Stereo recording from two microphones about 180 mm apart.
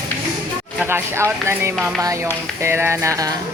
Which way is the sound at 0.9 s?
15° right (ahead or behind).